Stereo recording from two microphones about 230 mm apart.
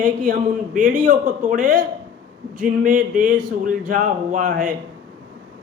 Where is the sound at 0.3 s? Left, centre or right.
Right.